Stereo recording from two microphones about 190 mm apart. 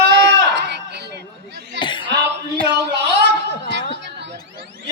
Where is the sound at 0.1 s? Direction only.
60° right (ahead or behind).